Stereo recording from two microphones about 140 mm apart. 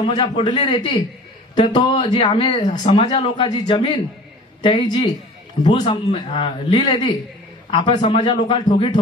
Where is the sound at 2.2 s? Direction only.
35° left (ahead or behind).